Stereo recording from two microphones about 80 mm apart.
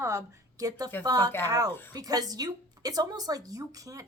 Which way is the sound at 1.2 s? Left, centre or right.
Left.